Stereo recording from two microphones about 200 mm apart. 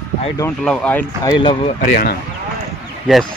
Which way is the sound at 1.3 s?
25° left (ahead or behind).